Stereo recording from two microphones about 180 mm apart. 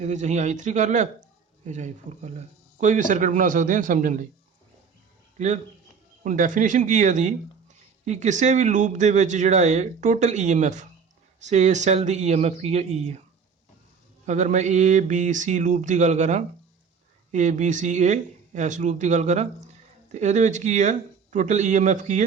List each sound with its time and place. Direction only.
0.0 s a man's voice: 40° right (ahead or behind)
5.4 s a man's voice: 40° right (ahead or behind)
14.3 s a man's voice: 40° right (ahead or behind)